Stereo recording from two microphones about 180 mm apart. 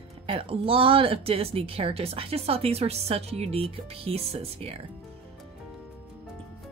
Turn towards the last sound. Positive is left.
turn(degrees=-35)  # may be behind; listen again after turning